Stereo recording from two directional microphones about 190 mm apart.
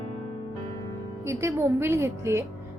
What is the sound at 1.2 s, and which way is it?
A woman's voice, 15° right (ahead or behind).